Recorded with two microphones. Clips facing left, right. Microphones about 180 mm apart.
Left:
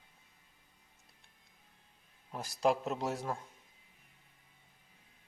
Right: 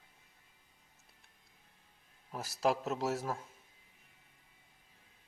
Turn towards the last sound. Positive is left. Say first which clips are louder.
# right 1 dB
turn(degrees=-5)  # may be behind; listen again after turning